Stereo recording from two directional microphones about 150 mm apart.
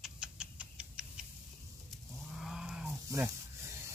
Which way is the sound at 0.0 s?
5° right (ahead or behind).